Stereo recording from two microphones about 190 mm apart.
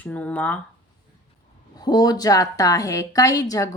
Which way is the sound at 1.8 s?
20° left (ahead or behind).